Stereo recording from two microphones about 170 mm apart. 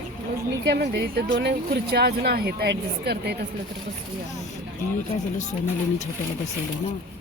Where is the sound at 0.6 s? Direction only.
75° right (ahead or behind).